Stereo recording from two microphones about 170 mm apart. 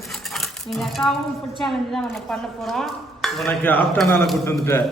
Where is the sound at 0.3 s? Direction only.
Centre (ahead or behind).